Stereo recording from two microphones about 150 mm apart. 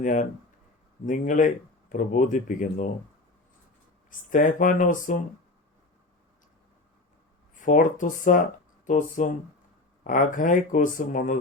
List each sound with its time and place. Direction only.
0.0 s speech: 55° left (ahead or behind)
4.3 s speech: 60° left (ahead or behind)
7.5 s speech: 60° left (ahead or behind)